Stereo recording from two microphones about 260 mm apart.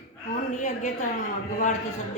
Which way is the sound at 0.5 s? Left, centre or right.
Left.